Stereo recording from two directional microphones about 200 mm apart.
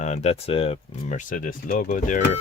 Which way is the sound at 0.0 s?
35° left (ahead or behind).